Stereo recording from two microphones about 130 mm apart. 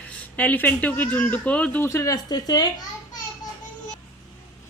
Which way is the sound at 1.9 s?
25° left (ahead or behind).